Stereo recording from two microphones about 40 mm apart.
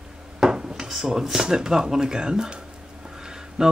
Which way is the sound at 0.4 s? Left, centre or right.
Centre.